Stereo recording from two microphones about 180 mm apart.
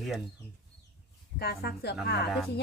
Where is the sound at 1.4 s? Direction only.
60° left (ahead or behind).